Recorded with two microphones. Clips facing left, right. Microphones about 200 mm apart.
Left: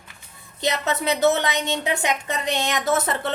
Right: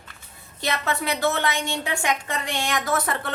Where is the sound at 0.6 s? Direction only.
20° left (ahead or behind).